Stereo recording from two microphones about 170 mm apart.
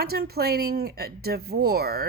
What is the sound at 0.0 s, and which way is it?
Speech, 70° right (ahead or behind).